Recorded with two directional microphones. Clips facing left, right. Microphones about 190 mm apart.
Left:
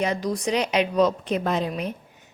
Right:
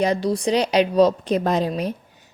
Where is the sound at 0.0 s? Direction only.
35° right (ahead or behind).